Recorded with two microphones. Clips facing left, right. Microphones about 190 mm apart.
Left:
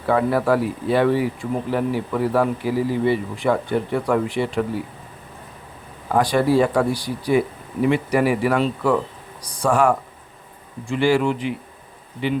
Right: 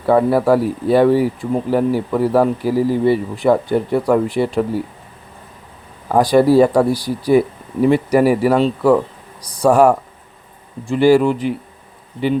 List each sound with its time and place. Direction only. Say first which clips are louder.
0.1 s speech: right 5 dB; 35° right (ahead or behind)
6.1 s speech: right 6 dB; 40° right (ahead or behind)